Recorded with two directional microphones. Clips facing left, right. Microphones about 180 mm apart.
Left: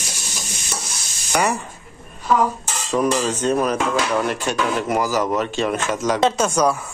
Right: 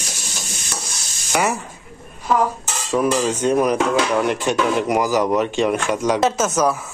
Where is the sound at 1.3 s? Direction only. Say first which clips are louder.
Even; 5° right (ahead or behind).